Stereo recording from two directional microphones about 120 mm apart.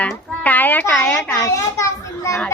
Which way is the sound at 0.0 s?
15° left (ahead or behind).